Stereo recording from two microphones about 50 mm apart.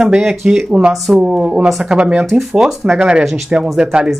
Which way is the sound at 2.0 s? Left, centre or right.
Right.